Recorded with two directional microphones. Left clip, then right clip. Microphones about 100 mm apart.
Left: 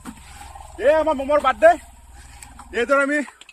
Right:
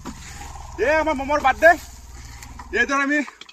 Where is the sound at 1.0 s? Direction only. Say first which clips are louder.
Left 1 dB; 20° left (ahead or behind).